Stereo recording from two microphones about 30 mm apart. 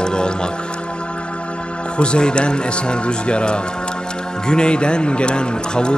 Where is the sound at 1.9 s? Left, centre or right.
Left.